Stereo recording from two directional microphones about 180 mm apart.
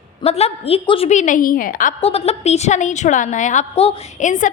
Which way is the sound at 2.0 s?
35° left (ahead or behind).